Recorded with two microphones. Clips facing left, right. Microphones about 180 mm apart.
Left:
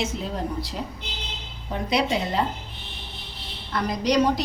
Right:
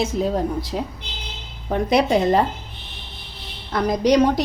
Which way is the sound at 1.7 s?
50° right (ahead or behind).